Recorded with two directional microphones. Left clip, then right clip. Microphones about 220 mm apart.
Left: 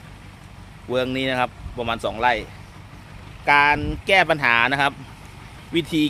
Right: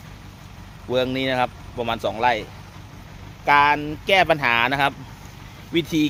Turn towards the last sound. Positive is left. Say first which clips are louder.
# even
turn(degrees=10)  # may be behind; listen again after turning